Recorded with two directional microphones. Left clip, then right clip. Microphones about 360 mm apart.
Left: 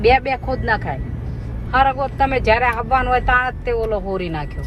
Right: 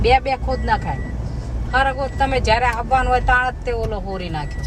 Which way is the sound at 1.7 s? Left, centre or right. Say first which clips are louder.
Left 3 dB; centre.